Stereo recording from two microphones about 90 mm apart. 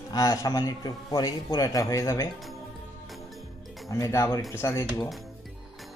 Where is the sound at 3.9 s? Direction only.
35° left (ahead or behind).